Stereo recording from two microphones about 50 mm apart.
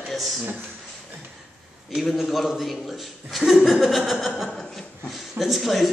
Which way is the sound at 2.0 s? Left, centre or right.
Centre.